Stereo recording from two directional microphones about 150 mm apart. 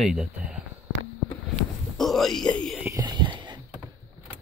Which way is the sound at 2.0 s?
Centre (ahead or behind).